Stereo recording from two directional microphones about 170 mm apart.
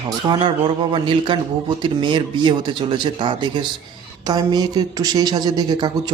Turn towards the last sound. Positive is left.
turn(degrees=-25)  # may be behind; listen again after turning